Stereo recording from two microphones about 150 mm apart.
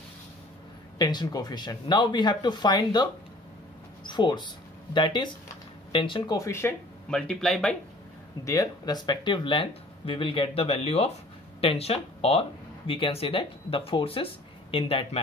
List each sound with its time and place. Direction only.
0.9 s speech: 30° left (ahead or behind)
7.1 s speech: 5° left (ahead or behind)
8.5 s speech: 25° left (ahead or behind)